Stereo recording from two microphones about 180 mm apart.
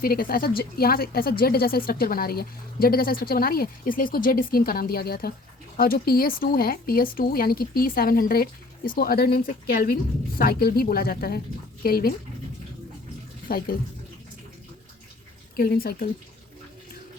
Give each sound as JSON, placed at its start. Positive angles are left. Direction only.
{"t": 0.0, "sound": "speech", "side_deg": 55}
{"t": 13.5, "sound": "speech", "side_deg": 55}
{"t": 15.5, "sound": "speech", "side_deg": 55}